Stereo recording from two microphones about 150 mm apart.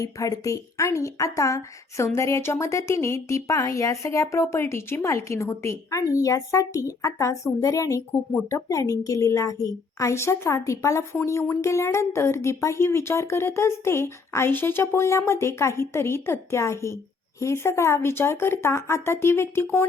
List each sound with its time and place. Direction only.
0.0 s a woman's voice: 20° left (ahead or behind)